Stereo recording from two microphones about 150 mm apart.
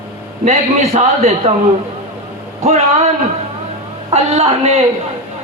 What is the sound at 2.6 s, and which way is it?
A man's voice, 45° right (ahead or behind).